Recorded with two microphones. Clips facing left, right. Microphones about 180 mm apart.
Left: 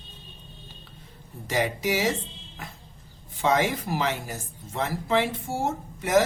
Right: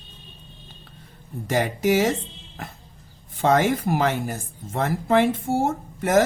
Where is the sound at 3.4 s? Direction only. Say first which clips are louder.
Right 4 dB; 50° right (ahead or behind).